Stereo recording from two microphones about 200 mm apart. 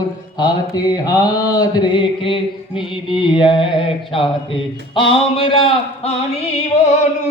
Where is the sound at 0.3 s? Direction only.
20° left (ahead or behind).